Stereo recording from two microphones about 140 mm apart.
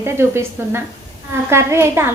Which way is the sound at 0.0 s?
15° right (ahead or behind).